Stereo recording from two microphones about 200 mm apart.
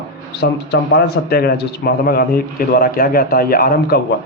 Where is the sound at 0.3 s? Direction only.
55° left (ahead or behind).